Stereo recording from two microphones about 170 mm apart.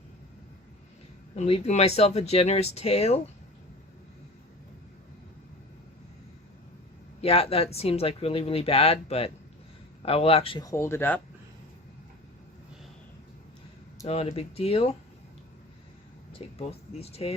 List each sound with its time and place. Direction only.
1.4 s speech: 40° left (ahead or behind)
7.2 s speech: 35° left (ahead or behind)
10.6 s speech: 15° left (ahead or behind)
14.1 s speech: 40° left (ahead or behind)
16.3 s speech: 35° left (ahead or behind)